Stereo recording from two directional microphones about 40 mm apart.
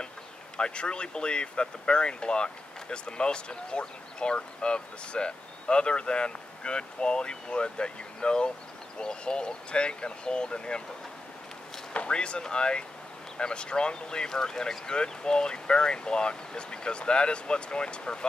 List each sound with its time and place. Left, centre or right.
0.6 s speech: left
11.9 s speech: left